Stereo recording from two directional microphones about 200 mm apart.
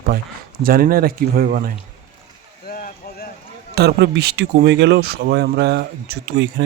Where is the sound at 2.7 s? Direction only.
45° left (ahead or behind).